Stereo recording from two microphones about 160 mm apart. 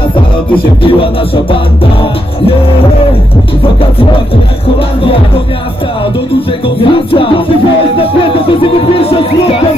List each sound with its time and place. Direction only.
0.8 s music: 35° left (ahead or behind)
6.8 s music: 35° left (ahead or behind)
8.9 s music: 40° left (ahead or behind)